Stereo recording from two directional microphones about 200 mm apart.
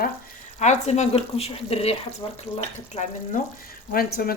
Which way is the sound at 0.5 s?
35° left (ahead or behind).